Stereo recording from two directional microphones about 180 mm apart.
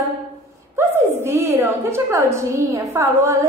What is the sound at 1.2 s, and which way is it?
A woman's voice, 15° right (ahead or behind).